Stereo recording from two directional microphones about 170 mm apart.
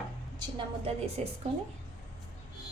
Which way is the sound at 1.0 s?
35° right (ahead or behind).